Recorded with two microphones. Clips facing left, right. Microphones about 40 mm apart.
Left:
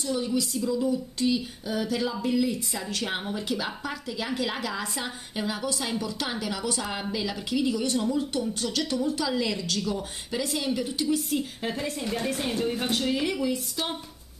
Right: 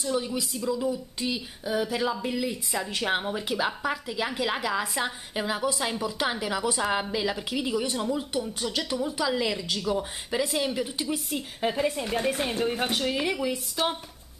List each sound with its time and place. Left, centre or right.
0.0 s speech: centre